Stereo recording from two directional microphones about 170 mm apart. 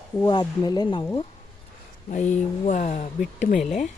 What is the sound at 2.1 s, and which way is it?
Speech, 45° left (ahead or behind).